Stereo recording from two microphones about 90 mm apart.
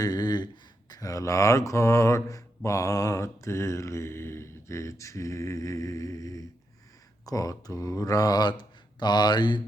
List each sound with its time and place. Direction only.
0.0 s speech: 50° left (ahead or behind)
2.6 s mantra: 35° left (ahead or behind)
7.3 s speech: 40° left (ahead or behind)